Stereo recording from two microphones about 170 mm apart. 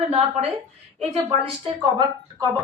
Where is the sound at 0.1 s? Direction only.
35° right (ahead or behind).